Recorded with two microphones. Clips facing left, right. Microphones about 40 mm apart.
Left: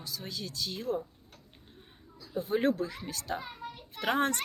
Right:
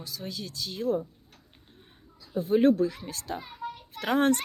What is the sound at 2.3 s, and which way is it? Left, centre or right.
A child's voice, centre.